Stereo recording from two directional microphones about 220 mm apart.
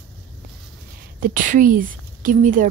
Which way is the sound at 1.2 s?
35° right (ahead or behind).